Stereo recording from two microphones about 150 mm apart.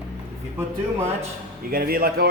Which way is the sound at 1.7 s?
80° right.